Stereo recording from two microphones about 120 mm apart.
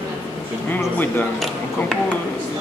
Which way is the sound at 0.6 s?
15° left (ahead or behind).